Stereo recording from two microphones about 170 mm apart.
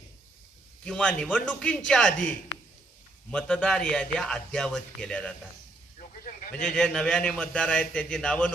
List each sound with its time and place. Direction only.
0.9 s a man's voice: 5° left (ahead or behind)
6.7 s a man's voice: 5° left (ahead or behind)